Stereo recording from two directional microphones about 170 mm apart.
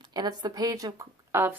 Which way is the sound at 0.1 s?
25° right (ahead or behind).